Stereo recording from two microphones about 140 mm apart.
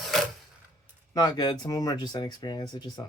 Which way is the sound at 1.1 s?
30° left (ahead or behind).